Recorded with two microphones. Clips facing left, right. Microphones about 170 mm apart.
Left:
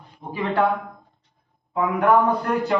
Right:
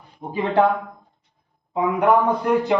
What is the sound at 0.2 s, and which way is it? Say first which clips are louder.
Speech: right 2 dB; 35° right (ahead or behind).